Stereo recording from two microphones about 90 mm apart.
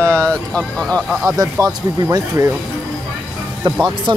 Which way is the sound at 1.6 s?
40° right (ahead or behind).